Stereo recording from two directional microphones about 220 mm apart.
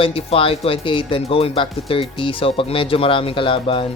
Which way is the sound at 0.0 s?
25° left (ahead or behind).